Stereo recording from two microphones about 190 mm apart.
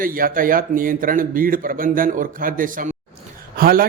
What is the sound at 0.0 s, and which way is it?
A man's voice, 50° right (ahead or behind).